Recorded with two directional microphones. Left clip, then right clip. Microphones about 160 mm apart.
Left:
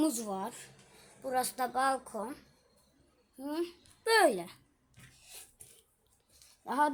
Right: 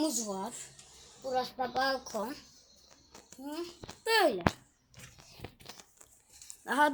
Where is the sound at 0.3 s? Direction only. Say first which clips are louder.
Even; 15° left (ahead or behind).